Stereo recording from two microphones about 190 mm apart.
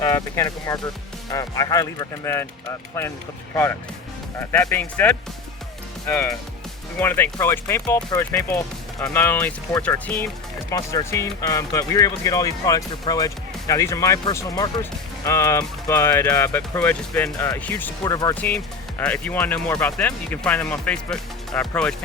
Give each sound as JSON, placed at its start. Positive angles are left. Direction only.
{"t": 0.0, "sound": "speech", "side_deg": 20}
{"t": 10.7, "sound": "speech", "side_deg": 15}
{"t": 18.3, "sound": "speech", "side_deg": 10}